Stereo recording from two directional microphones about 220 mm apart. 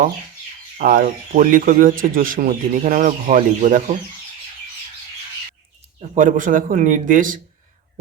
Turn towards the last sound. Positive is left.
turn(degrees=-35)  # may be behind; listen again after turning